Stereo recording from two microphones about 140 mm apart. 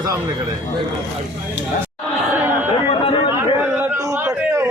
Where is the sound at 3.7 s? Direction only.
20° right (ahead or behind).